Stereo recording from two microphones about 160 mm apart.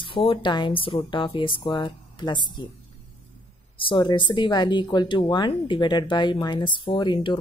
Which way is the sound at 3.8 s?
30° left (ahead or behind).